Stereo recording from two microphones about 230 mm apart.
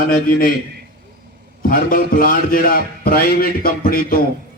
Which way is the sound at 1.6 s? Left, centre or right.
Left.